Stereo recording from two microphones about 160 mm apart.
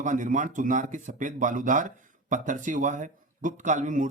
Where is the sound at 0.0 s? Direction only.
50° right (ahead or behind).